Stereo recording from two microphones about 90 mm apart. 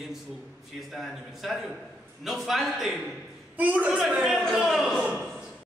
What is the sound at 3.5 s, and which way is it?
Speech, 15° right (ahead or behind).